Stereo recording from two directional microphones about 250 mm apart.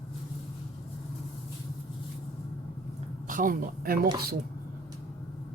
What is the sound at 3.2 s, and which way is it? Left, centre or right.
Speech, right.